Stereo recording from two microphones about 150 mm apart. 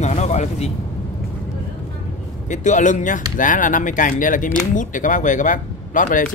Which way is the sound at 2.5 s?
55° left (ahead or behind).